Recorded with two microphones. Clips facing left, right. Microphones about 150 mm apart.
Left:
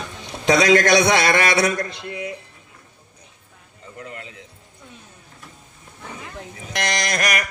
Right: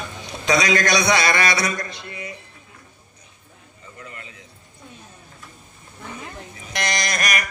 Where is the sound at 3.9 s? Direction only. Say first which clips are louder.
Left 5 dB; 65° left (ahead or behind).